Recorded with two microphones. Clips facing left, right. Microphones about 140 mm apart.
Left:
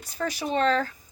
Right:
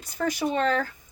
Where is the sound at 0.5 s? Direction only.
35° left (ahead or behind).